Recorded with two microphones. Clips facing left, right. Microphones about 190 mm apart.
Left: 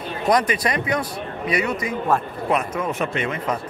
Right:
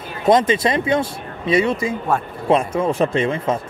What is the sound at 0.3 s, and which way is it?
Speech, 25° right (ahead or behind).